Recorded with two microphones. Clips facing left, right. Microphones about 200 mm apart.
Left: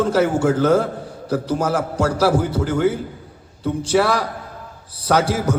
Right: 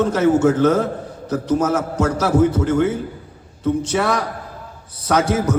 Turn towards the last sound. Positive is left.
turn(degrees=30)  # may be behind; listen again after turning